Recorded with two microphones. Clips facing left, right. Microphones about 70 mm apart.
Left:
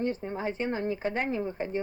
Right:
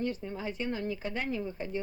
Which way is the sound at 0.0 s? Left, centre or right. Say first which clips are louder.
Left 4 dB; left.